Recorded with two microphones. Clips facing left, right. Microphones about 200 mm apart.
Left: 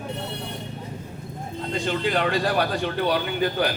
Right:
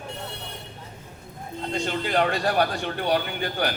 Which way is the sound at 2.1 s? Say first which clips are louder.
Even; 45° right (ahead or behind).